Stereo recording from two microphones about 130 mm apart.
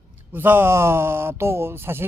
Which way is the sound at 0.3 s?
15° right (ahead or behind).